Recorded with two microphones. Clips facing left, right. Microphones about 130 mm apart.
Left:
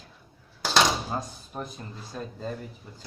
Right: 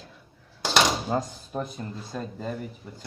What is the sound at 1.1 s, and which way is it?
Speech, 70° right (ahead or behind).